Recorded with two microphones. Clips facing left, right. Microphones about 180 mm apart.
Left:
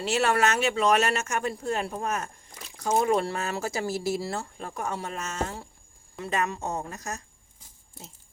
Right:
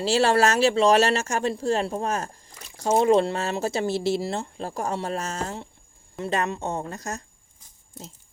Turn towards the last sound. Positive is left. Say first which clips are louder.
# right 3 dB
turn(degrees=-30)  # may be behind; listen again after turning